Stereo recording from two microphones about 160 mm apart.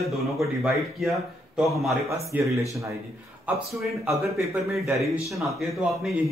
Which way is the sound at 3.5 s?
10° right (ahead or behind).